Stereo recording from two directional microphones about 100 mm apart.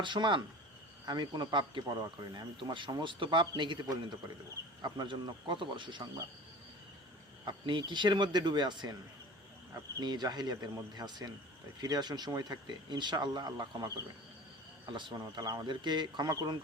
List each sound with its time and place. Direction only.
0.0 s speech: 50° right (ahead or behind)
7.4 s speech: 50° right (ahead or behind)
10.0 s speech: 45° right (ahead or behind)
15.7 s speech: 50° right (ahead or behind)